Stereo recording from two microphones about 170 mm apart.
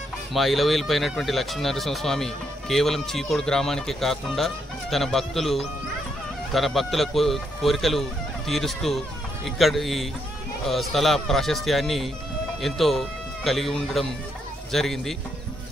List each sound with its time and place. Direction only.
0.3 s speech: centre (ahead or behind)